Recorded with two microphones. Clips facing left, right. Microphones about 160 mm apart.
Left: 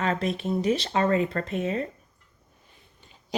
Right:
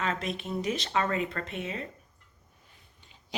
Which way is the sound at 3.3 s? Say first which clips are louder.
Left 8 dB; 40° left (ahead or behind).